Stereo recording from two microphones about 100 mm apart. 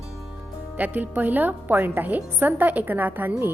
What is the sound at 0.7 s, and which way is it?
Speech, 15° right (ahead or behind).